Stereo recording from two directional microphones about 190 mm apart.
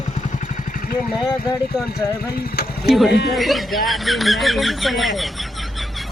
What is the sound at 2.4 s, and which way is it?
Speech, 55° left (ahead or behind).